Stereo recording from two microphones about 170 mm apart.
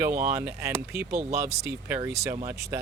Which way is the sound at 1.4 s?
40° right (ahead or behind).